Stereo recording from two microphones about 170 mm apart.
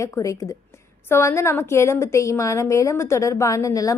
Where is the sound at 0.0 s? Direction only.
20° left (ahead or behind).